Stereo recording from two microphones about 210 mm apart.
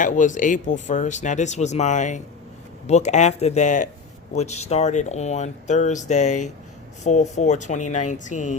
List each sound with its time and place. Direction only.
0.0 s speech: 40° left (ahead or behind)